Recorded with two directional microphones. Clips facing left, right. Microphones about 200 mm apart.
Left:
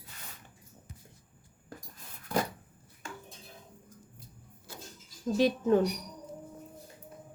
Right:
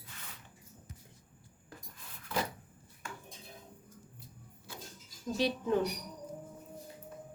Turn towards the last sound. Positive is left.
turn(degrees=45)  # may be behind; listen again after turning